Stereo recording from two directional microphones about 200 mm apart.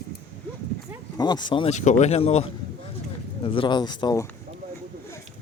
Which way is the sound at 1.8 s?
35° left (ahead or behind).